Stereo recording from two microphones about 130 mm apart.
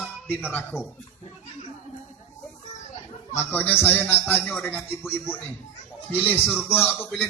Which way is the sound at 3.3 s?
15° left (ahead or behind).